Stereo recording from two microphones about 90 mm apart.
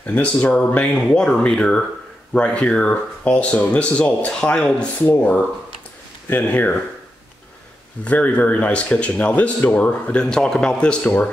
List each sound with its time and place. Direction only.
0.0 s speech: 15° left (ahead or behind)
8.0 s speech: 15° left (ahead or behind)